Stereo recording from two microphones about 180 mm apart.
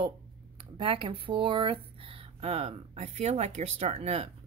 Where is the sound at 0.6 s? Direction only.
25° right (ahead or behind).